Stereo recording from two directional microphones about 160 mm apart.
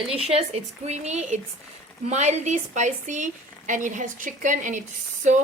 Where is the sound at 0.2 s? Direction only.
40° right (ahead or behind).